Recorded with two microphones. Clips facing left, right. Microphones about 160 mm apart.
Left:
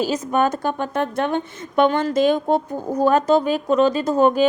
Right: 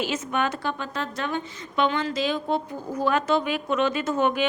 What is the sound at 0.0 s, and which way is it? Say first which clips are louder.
A woman's voice: left 7 dB; 40° left (ahead or behind).